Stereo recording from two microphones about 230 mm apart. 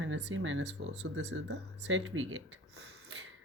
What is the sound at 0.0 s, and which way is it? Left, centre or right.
Speech, right.